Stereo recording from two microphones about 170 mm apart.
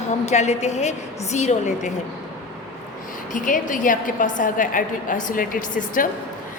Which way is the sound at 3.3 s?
50° left (ahead or behind).